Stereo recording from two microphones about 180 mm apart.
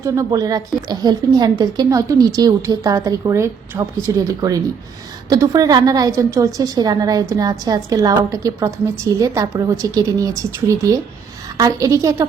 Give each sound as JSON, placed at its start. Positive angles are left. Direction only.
{"t": 0.0, "sound": "a woman's voice", "side_deg": -20}
{"t": 11.5, "sound": "a woman's voice", "side_deg": -20}